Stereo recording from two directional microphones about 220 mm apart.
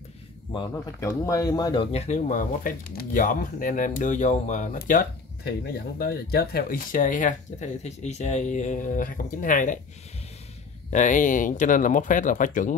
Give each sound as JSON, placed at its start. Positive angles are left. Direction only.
{"t": 0.5, "sound": "speech", "side_deg": 15}
{"t": 10.9, "sound": "speech", "side_deg": 35}